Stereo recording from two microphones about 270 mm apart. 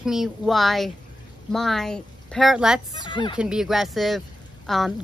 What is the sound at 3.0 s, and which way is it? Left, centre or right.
Speech, centre.